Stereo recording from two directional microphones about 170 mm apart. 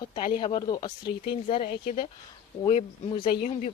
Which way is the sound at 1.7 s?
65° left (ahead or behind).